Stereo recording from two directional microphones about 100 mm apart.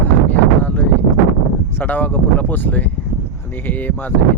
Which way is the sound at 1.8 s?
20° left (ahead or behind).